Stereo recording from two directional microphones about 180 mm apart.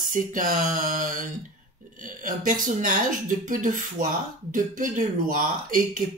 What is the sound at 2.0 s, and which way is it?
Speech, 45° right (ahead or behind).